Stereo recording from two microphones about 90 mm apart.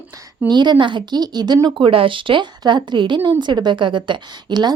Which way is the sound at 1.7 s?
70° right (ahead or behind).